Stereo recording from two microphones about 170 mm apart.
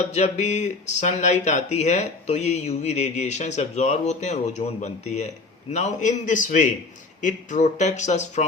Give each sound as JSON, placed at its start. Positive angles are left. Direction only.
{"t": 0.0, "sound": "speech", "side_deg": 45}